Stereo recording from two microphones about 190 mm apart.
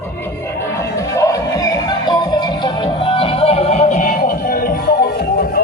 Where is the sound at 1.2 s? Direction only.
15° left (ahead or behind).